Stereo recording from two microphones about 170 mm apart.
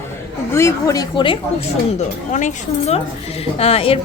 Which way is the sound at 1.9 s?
45° left (ahead or behind).